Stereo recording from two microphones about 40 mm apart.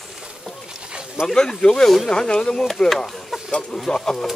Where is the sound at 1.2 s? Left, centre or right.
Centre.